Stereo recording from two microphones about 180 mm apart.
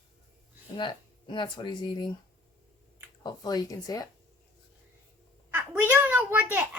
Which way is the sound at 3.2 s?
20° left (ahead or behind).